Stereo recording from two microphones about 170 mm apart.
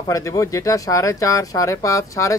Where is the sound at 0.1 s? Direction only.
20° left (ahead or behind).